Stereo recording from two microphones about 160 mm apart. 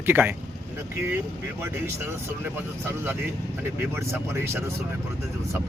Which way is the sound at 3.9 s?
15° right (ahead or behind).